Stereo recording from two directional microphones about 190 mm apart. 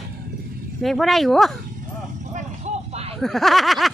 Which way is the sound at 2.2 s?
40° right (ahead or behind).